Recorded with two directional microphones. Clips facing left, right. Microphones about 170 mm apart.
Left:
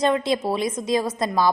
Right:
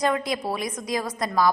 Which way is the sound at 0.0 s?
25° left (ahead or behind).